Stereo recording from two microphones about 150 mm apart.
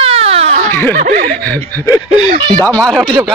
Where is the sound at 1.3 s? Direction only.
10° left (ahead or behind).